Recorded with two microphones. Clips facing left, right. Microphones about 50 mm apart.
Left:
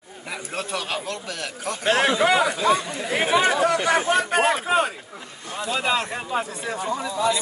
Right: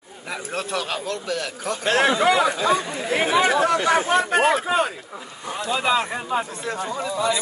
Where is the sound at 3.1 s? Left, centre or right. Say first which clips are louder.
Right 1 dB; centre.